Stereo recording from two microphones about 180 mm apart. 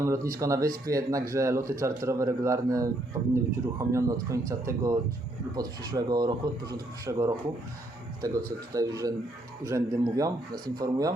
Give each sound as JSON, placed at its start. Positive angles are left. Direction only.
{"t": 0.0, "sound": "a man's voice", "side_deg": -15}
{"t": 8.7, "sound": "speech", "side_deg": -20}